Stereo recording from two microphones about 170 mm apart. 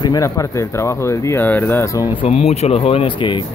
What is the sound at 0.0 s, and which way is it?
Speech, 20° left (ahead or behind).